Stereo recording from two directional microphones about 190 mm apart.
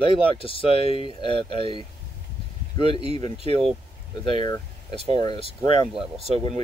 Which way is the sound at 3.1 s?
25° left (ahead or behind).